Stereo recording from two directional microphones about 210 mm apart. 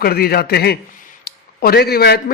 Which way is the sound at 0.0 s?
45° left (ahead or behind).